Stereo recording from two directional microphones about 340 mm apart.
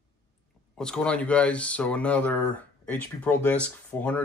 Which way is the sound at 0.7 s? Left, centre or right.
Centre.